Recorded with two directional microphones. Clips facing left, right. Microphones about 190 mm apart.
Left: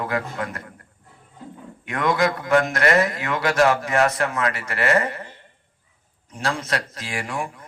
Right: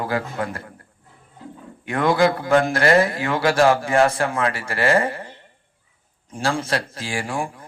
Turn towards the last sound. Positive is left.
turn(degrees=-30)  # may be behind; listen again after turning